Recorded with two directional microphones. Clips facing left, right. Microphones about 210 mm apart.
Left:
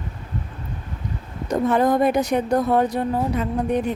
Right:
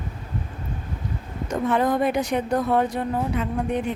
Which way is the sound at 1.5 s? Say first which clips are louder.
Left 3 dB; 40° left (ahead or behind).